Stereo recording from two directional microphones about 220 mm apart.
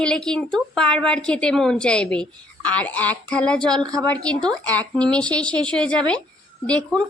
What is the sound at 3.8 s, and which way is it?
Speech, 15° right (ahead or behind).